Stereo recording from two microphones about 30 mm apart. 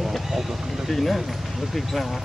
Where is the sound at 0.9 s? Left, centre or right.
Centre.